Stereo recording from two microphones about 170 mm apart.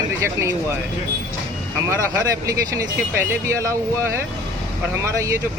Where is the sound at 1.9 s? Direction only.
15° right (ahead or behind).